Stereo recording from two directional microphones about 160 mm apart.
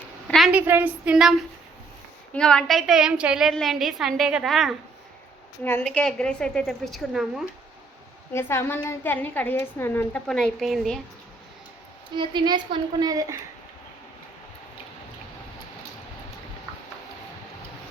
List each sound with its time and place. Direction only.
0.3 s a sound: centre (ahead or behind)
0.5 s a woman's voice: 10° right (ahead or behind)
5.8 s a woman's voice: 5° left (ahead or behind)
8.3 s a woman's voice: 15° left (ahead or behind)
12.1 s a woman's voice: 30° right (ahead or behind)